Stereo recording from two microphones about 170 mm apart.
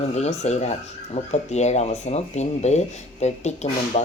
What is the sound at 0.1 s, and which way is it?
Speech, 40° left (ahead or behind).